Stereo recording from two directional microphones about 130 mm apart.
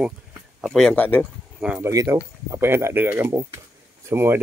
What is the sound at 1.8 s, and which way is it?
Speech, 25° right (ahead or behind).